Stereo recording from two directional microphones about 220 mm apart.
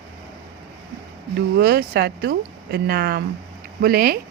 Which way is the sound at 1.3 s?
45° right (ahead or behind).